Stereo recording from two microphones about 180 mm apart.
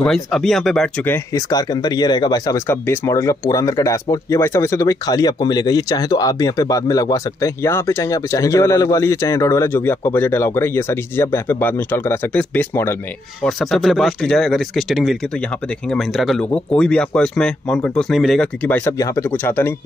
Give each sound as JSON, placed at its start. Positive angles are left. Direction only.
{"t": 0.0, "sound": "speech", "side_deg": 5}
{"t": 1.1, "sound": "speech", "side_deg": 20}
{"t": 13.4, "sound": "speech", "side_deg": 0}